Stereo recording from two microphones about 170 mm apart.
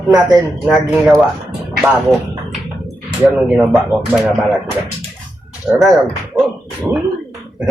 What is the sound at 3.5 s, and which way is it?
Speech, centre (ahead or behind).